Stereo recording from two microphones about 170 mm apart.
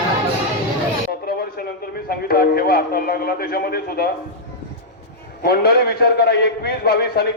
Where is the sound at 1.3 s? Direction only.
60° left (ahead or behind).